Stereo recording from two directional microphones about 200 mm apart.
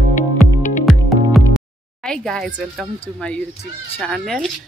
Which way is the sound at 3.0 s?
5° left (ahead or behind).